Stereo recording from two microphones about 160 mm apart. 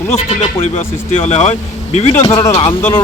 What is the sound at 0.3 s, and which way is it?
Speech, 40° left (ahead or behind).